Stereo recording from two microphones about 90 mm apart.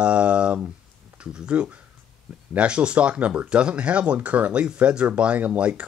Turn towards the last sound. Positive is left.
turn(degrees=-15)  # may be behind; listen again after turning